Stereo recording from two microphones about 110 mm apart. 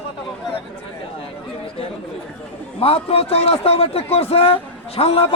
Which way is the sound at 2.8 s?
60° left (ahead or behind).